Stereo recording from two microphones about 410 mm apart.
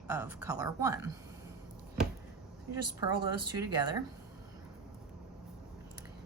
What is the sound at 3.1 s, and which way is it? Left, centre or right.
Speech, centre.